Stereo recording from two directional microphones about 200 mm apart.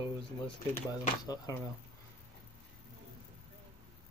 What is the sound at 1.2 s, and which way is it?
Speech, 20° left (ahead or behind).